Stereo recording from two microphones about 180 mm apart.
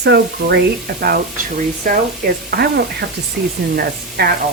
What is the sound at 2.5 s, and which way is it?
Speech, 65° right (ahead or behind).